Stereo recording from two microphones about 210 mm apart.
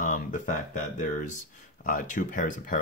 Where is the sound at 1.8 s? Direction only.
40° left (ahead or behind).